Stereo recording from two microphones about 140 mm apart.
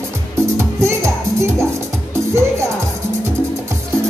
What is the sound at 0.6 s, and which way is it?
Music, 20° right (ahead or behind).